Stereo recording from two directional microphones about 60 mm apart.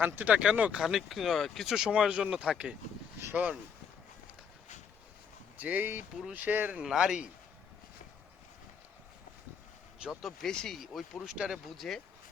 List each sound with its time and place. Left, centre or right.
0.0 s speech: right
0.8 s speech: centre
1.9 s speech: centre
5.5 s speech: right
6.8 s speech: centre
10.2 s speech: centre
10.5 s speech: centre
10.8 s speech: centre
11.8 s speech: centre